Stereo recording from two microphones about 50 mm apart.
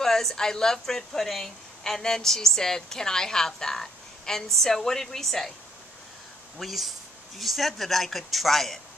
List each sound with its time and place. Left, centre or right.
0.0 s a woman's voice: centre
6.6 s speech: centre